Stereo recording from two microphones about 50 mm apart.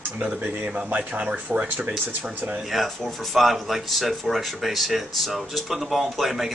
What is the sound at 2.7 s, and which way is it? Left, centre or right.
Speech, centre.